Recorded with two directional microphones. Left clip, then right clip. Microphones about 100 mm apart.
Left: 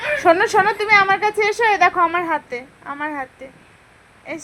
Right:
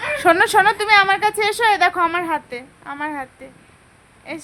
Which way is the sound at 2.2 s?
15° left (ahead or behind).